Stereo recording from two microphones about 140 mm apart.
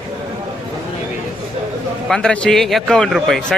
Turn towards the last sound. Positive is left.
turn(degrees=0)  # may be behind; listen again after turning